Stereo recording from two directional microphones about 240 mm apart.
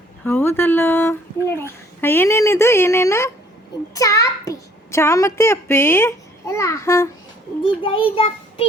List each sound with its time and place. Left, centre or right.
0.3 s a child's voice: centre
8.1 s child singing: left